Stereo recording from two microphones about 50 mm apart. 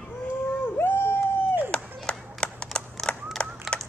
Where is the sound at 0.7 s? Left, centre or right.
Left.